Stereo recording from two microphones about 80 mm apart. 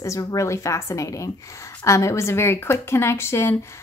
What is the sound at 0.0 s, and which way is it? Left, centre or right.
Speech, left.